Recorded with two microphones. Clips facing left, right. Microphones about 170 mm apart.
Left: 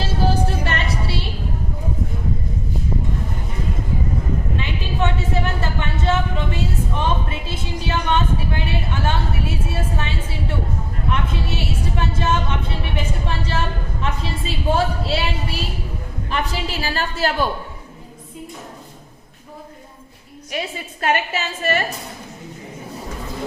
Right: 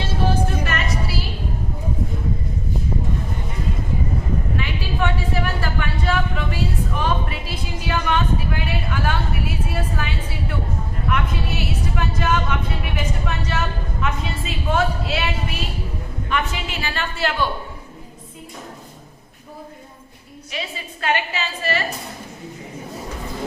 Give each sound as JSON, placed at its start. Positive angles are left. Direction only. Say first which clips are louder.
{"t": 0.0, "sound": "music", "louder": "left 1 dB", "side_deg": 30}
{"t": 4.5, "sound": "a sound", "louder": "even", "side_deg": 20}
{"t": 13.2, "sound": "a woman's voice", "louder": "left 1 dB", "side_deg": 30}
{"t": 20.5, "sound": "a woman's voice", "louder": "left 4 dB", "side_deg": 45}